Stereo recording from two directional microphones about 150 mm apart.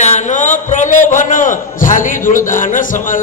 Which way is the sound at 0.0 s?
50° left (ahead or behind).